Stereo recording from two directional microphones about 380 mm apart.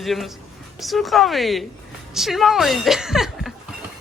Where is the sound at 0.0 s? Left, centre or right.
Centre.